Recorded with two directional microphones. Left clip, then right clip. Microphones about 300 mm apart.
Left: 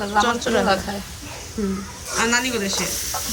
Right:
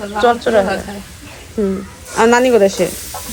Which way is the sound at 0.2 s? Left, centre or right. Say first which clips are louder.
Right 7 dB; centre.